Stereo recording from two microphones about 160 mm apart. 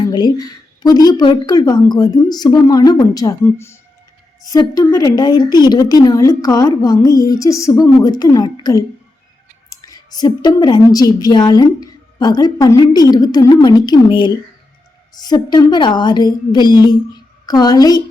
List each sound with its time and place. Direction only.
0.1 s speech: 25° left (ahead or behind)
9.6 s clicking: 25° left (ahead or behind)
10.9 s a woman's voice: 25° left (ahead or behind)